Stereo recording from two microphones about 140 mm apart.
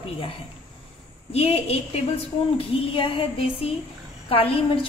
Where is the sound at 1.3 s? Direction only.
45° left (ahead or behind).